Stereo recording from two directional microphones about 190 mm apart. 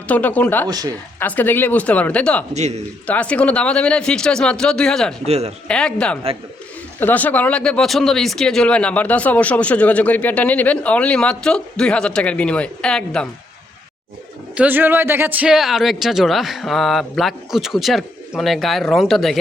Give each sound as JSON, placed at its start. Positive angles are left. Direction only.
{"t": 0.1, "sound": "speech", "side_deg": 10}
{"t": 0.7, "sound": "speech", "side_deg": -20}
{"t": 1.2, "sound": "speech", "side_deg": 10}
{"t": 2.5, "sound": "a man's voice", "side_deg": -35}
{"t": 3.1, "sound": "speech", "side_deg": 5}
{"t": 5.2, "sound": "a man's voice", "side_deg": -35}
{"t": 5.6, "sound": "speech", "side_deg": 5}
{"t": 14.5, "sound": "speech", "side_deg": -10}